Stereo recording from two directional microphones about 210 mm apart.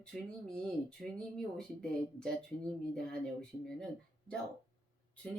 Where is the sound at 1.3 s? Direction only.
5° left (ahead or behind).